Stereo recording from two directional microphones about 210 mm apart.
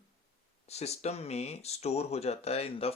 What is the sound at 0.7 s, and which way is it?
Speech, 30° left (ahead or behind).